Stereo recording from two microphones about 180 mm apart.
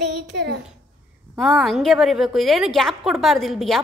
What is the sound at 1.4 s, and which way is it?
A woman's voice, centre (ahead or behind).